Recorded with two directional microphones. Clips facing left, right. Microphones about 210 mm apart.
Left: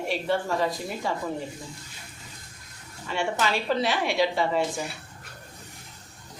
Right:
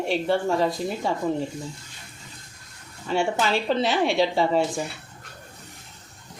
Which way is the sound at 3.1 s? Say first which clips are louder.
Right 4 dB; 30° right (ahead or behind).